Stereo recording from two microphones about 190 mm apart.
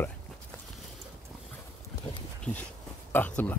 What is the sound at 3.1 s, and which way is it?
Speech, 10° left (ahead or behind).